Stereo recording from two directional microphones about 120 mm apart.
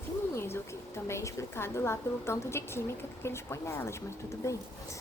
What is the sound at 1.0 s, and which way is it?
Speech, 20° left (ahead or behind).